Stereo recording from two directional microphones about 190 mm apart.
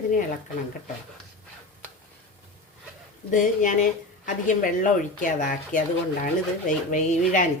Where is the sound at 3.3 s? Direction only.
40° left (ahead or behind).